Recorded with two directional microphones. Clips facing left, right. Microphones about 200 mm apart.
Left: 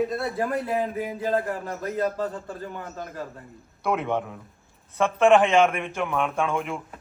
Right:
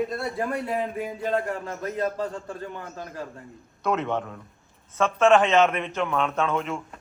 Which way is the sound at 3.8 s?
10° left (ahead or behind).